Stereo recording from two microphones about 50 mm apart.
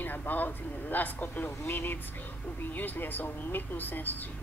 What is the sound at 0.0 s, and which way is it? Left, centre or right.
Speech, left.